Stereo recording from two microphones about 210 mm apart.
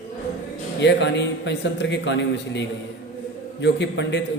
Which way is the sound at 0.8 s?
55° left (ahead or behind).